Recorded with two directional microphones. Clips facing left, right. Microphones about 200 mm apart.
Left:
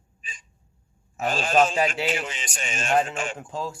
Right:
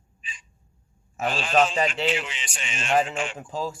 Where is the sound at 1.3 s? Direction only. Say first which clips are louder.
Left 1 dB; 45° left (ahead or behind).